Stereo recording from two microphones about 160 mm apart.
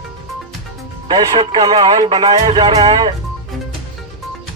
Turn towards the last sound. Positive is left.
turn(degrees=-30)  # may be behind; listen again after turning